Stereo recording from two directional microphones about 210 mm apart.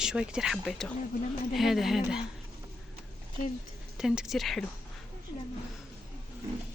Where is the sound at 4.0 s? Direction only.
Centre (ahead or behind).